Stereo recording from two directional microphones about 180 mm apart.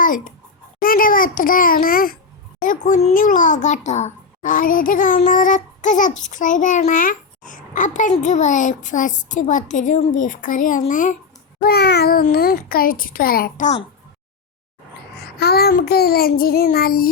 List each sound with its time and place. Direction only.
0.0 s a child's voice: 50° left (ahead or behind)
11.6 s child singing: 60° left (ahead or behind)
12.3 s a child's voice: 55° left (ahead or behind)
15.4 s child singing: 60° left (ahead or behind)